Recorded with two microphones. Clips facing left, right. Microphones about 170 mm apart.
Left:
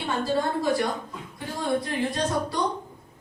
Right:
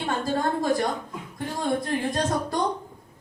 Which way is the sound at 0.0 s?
45° right (ahead or behind).